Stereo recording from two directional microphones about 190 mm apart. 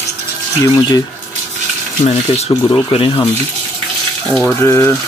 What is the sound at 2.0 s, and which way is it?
Speech, 35° left (ahead or behind).